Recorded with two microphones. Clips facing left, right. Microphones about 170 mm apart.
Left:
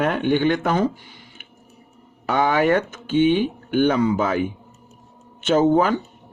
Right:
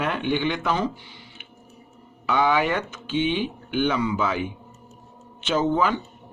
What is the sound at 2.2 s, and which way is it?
Speech, 50° left (ahead or behind).